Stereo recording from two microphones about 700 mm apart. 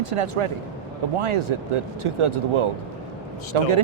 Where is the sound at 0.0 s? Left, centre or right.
Right.